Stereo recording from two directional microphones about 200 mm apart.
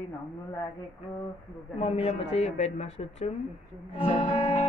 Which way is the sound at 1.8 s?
30° left (ahead or behind).